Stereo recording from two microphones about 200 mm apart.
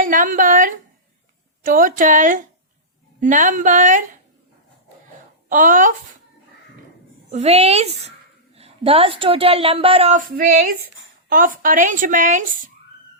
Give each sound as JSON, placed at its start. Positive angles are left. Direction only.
{"t": 0.0, "sound": "a sound", "side_deg": -40}
{"t": 1.6, "sound": "a child's voice", "side_deg": -40}
{"t": 5.5, "sound": "a child's voice", "side_deg": -40}
{"t": 7.3, "sound": "a child's voice", "side_deg": -35}
{"t": 10.2, "sound": "a sound", "side_deg": -45}
{"t": 11.3, "sound": "a child's voice", "side_deg": -45}